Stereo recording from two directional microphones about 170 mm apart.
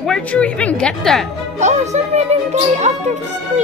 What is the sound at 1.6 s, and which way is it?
Speech, 45° right (ahead or behind).